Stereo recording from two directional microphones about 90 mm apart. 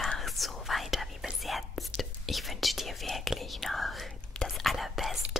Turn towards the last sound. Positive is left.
turn(degrees=0)  # may be behind; listen again after turning